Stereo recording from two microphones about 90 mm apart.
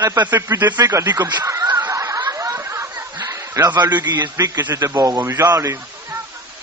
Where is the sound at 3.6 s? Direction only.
55° right (ahead or behind).